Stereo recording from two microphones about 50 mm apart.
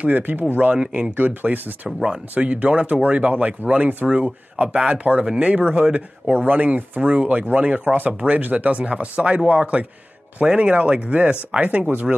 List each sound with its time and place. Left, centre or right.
0.0 s speech: right
0.7 s speech: right
1.1 s speech: right
6.3 s speech: right